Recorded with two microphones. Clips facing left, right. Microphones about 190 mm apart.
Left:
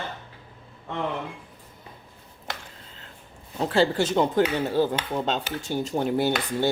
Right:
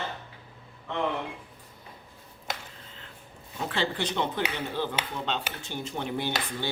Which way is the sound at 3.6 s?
40° left (ahead or behind).